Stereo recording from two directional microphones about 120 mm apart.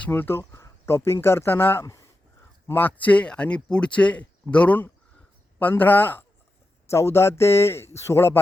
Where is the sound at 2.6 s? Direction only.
15° left (ahead or behind).